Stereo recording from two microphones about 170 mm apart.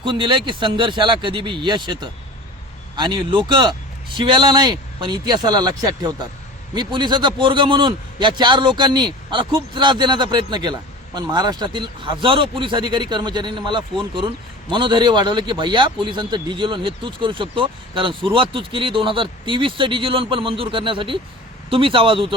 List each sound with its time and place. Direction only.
0.0 s a man's voice: 30° right (ahead or behind)